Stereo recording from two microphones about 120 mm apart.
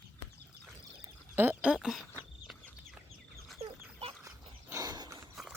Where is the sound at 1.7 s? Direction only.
Centre (ahead or behind).